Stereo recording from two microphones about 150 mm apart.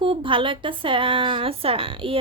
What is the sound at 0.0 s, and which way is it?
Speech, 35° right (ahead or behind).